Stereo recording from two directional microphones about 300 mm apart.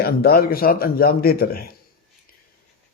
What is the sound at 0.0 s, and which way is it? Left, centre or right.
A man's voice, left.